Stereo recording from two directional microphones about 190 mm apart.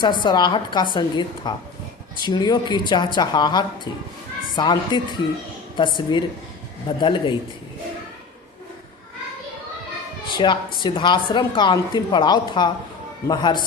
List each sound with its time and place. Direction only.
0.0 s a woman's voice: 25° left (ahead or behind)
10.3 s a woman's voice: 25° left (ahead or behind)